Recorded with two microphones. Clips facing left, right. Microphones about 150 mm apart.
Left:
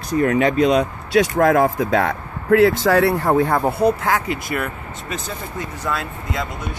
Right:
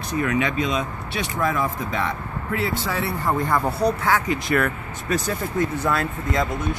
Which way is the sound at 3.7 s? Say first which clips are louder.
Left 4 dB; 55° left (ahead or behind).